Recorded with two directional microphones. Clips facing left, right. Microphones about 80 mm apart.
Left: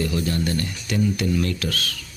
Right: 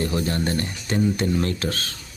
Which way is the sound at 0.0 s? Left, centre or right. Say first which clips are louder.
Even; right.